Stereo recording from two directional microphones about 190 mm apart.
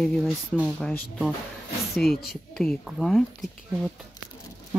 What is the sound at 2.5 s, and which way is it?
Speech, 5° left (ahead or behind).